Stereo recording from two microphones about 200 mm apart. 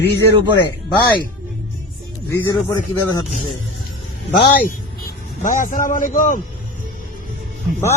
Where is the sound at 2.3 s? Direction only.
15° left (ahead or behind).